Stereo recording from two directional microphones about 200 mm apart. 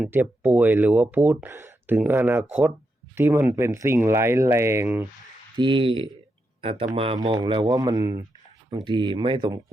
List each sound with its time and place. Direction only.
0.0 s speech: 10° right (ahead or behind)
5.5 s speech: 25° right (ahead or behind)